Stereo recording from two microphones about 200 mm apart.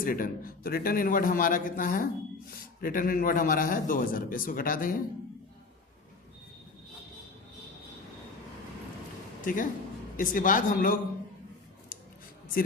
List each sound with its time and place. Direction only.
0.0 s a man's voice: 45° left (ahead or behind)
9.4 s a man's voice: 45° left (ahead or behind)